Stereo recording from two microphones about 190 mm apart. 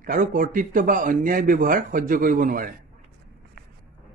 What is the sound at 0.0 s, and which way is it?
A man's voice, 45° right (ahead or behind).